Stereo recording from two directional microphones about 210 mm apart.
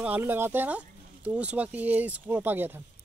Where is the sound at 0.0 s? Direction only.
10° right (ahead or behind).